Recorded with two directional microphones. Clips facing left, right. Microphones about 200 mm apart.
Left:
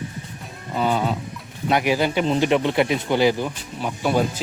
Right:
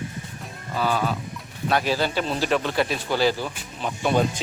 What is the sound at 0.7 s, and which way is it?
Speech, 20° left (ahead or behind).